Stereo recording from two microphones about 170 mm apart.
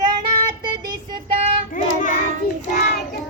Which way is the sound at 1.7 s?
50° left (ahead or behind).